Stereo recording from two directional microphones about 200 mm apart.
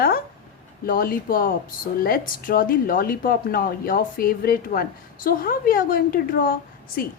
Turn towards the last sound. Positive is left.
turn(degrees=45)  # may be behind; listen again after turning